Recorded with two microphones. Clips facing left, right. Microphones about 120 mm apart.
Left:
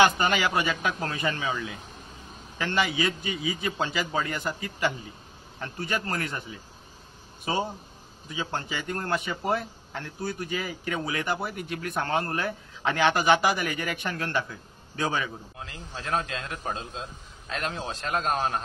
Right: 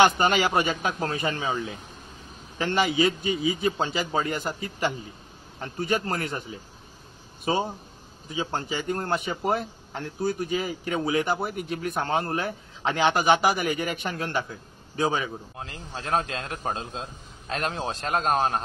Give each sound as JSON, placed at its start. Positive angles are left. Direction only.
{"t": 0.0, "sound": "a man's voice", "side_deg": -30}
{"t": 8.3, "sound": "a man's voice", "side_deg": -25}
{"t": 15.6, "sound": "a man's voice", "side_deg": -35}